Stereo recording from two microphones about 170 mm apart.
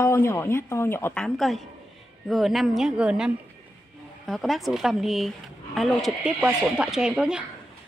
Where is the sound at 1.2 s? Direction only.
Centre (ahead or behind).